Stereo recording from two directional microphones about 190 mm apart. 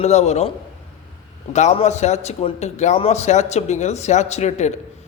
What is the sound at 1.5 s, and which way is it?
A man's voice, 35° left (ahead or behind).